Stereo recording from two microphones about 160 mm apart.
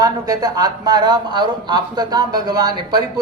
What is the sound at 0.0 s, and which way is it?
Speech, 25° right (ahead or behind).